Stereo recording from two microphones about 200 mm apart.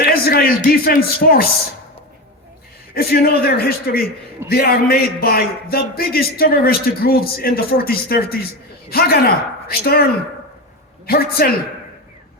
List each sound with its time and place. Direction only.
0.0 s speech: 50° left (ahead or behind)
2.9 s a man's voice: 50° left (ahead or behind)